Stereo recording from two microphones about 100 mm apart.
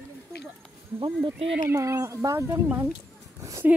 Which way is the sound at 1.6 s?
35° right (ahead or behind).